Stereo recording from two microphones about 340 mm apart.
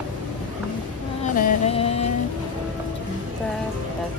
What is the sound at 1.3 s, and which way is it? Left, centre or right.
Music, left.